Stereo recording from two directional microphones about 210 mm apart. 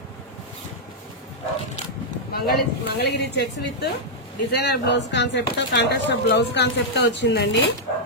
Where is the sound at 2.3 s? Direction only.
50° left (ahead or behind).